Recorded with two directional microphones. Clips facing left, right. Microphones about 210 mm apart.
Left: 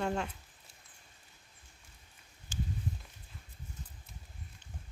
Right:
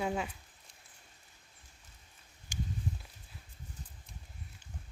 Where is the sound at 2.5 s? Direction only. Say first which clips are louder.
Left 1 dB; 15° right (ahead or behind).